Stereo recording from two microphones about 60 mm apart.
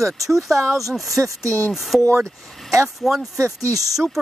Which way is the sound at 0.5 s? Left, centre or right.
Right.